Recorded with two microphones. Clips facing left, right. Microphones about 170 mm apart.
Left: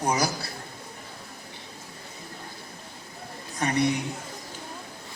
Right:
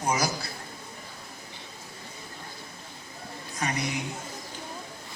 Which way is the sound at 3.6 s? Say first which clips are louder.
Left 7 dB; 30° left (ahead or behind).